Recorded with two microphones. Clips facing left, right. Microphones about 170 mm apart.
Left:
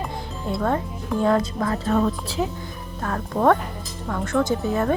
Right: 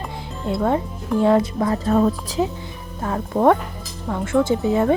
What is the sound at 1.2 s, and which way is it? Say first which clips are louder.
Speech: right 4 dB; 20° right (ahead or behind).